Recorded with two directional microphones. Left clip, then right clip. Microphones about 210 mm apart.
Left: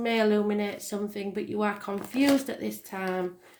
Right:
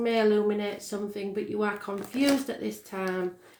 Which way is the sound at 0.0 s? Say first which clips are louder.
Right 1 dB; 35° left (ahead or behind).